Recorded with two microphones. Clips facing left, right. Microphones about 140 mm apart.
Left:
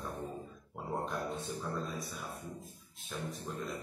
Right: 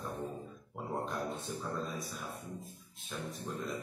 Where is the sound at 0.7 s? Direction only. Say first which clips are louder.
Even; centre (ahead or behind).